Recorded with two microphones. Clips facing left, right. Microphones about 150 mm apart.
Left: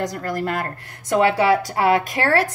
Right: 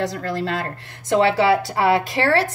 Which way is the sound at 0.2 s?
25° right (ahead or behind).